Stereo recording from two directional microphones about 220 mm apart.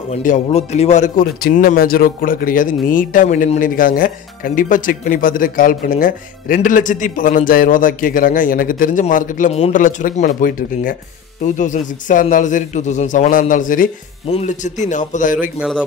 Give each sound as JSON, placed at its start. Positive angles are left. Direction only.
{"t": 0.1, "sound": "speech", "side_deg": 35}